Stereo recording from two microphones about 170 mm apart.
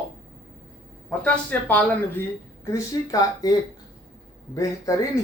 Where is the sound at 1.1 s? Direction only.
5° left (ahead or behind).